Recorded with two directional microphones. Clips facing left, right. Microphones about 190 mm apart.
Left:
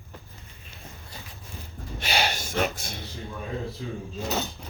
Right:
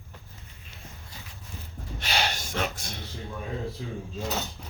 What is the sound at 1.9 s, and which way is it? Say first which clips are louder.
Gasp: left 2 dB; 10° left (ahead or behind).